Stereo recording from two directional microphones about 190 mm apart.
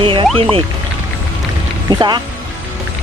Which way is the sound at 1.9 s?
20° right (ahead or behind).